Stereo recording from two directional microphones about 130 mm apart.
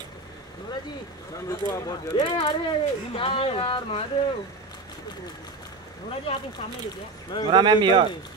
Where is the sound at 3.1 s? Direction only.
45° left (ahead or behind).